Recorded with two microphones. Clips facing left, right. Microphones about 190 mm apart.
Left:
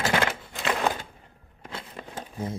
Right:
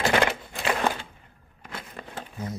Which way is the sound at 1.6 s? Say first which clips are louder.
Left 1 dB; 30° left (ahead or behind).